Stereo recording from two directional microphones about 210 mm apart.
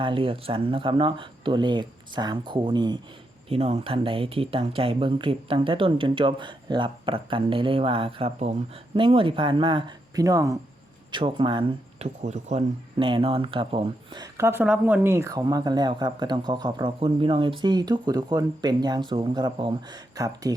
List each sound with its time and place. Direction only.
0.0 s speech: 25° right (ahead or behind)